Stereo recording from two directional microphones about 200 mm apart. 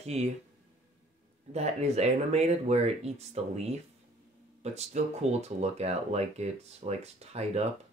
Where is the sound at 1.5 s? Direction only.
35° right (ahead or behind).